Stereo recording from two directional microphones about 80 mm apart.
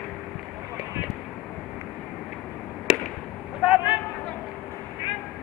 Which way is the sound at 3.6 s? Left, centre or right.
Centre.